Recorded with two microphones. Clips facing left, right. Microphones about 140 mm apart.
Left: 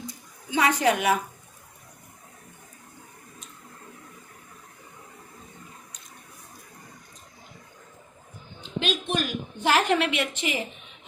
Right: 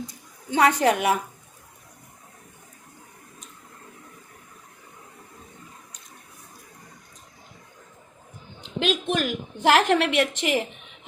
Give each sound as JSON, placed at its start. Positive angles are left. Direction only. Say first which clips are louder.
{"t": 0.5, "sound": "a woman's voice", "louder": "right 3 dB", "side_deg": -50}
{"t": 8.8, "sound": "a woman's voice", "louder": "right 3 dB", "side_deg": -90}